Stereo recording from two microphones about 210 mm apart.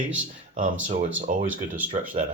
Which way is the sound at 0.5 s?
40° right (ahead or behind).